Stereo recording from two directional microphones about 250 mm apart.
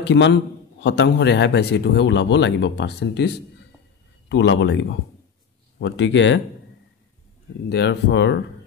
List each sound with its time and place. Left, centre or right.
0.0 s a man's voice: left
7.7 s a man's voice: left